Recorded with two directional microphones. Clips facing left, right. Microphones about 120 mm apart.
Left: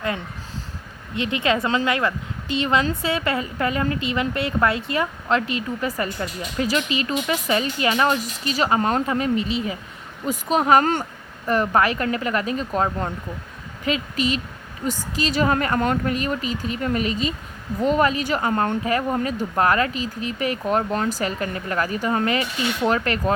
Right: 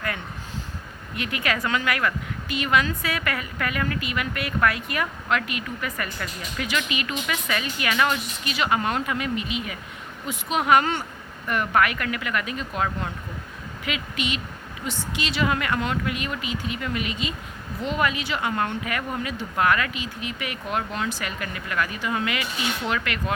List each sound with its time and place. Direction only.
1.1 s a woman's voice: 25° left (ahead or behind)